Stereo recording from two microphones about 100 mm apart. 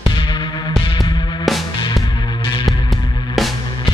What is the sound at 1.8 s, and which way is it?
Music, 45° left (ahead or behind).